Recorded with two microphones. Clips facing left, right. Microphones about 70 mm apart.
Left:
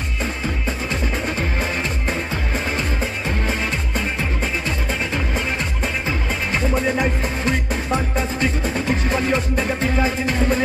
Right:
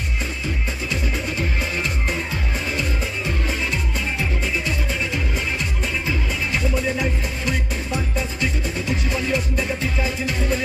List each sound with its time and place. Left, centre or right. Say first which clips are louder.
4.2 s music: left 1 dB; left